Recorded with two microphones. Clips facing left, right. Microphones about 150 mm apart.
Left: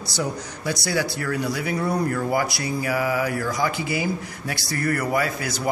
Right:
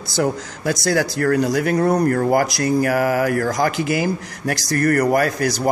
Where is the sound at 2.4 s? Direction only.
90° right.